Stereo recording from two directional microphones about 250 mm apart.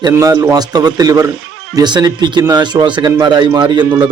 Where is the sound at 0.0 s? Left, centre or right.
Centre.